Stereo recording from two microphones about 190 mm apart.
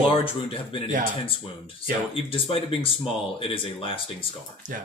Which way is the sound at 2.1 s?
30° left (ahead or behind).